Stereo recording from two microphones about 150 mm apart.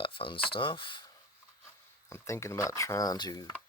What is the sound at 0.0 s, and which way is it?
Speech, 35° left (ahead or behind).